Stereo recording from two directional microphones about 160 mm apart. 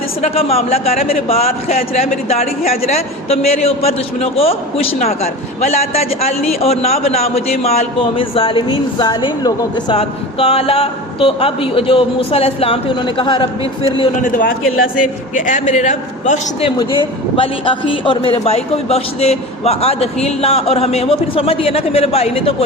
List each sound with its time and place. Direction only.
0.2 s a man's voice: 40° left (ahead or behind)
14.2 s a man's voice: 60° left (ahead or behind)
16.6 s a man's voice: 30° left (ahead or behind)